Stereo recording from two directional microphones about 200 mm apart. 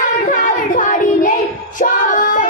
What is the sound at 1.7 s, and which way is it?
Female singing, 40° left (ahead or behind).